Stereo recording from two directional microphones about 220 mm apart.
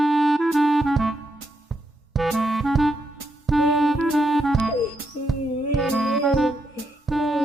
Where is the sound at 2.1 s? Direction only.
Centre (ahead or behind).